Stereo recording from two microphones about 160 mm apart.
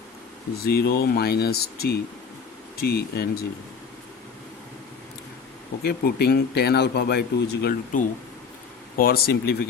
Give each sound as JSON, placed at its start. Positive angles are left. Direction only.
{"t": 0.6, "sound": "speech", "side_deg": 75}
{"t": 5.8, "sound": "speech", "side_deg": 85}
{"t": 7.9, "sound": "speech", "side_deg": 55}
{"t": 9.0, "sound": "speech", "side_deg": 70}